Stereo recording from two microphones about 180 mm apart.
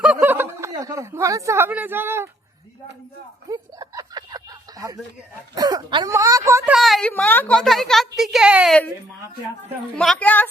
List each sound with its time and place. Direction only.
0.0 s chuckle: 5° right (ahead or behind)
0.7 s speech: 20° right (ahead or behind)
3.5 s a sound: 20° right (ahead or behind)
5.5 s speech: 20° right (ahead or behind)
6.7 s a woman's voice: centre (ahead or behind)
9.9 s a woman's voice: 5° left (ahead or behind)